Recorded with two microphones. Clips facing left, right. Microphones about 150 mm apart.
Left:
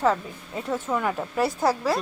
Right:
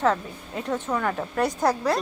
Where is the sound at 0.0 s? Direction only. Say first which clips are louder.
Even; 5° left (ahead or behind).